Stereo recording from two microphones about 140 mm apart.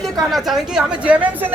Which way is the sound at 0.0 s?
Centre (ahead or behind).